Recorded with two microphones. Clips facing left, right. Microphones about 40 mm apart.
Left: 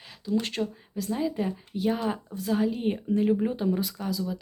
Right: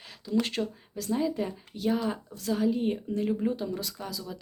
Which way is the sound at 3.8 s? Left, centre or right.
Centre.